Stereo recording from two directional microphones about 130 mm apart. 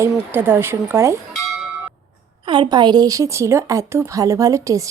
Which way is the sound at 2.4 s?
40° right (ahead or behind).